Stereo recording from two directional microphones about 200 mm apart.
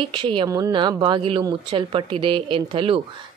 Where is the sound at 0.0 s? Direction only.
25° right (ahead or behind).